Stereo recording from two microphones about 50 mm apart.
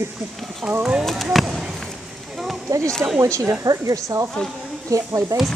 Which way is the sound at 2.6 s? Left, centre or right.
Right.